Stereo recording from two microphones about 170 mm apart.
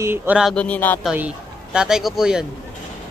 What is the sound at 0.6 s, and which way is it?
Speech, 10° left (ahead or behind).